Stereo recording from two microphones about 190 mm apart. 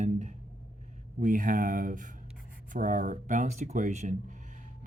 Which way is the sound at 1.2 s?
45° right (ahead or behind).